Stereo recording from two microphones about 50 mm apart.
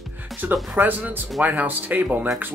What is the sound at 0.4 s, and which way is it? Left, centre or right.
Speech, right.